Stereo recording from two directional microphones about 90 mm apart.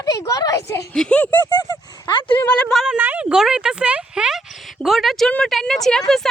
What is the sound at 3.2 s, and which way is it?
Speech, 5° right (ahead or behind).